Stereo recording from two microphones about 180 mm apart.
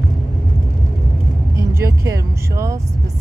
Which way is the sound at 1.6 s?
15° right (ahead or behind).